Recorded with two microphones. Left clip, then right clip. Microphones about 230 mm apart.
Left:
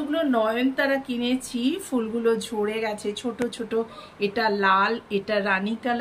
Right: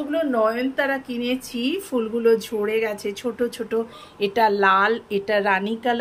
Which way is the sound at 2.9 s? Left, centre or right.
Right.